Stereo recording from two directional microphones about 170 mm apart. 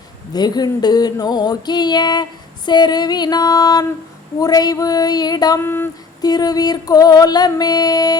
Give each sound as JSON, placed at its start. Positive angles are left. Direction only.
{"t": 0.3, "sound": "female singing", "side_deg": 25}